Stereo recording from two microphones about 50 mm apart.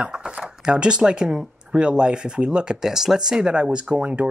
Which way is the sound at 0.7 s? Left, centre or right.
Centre.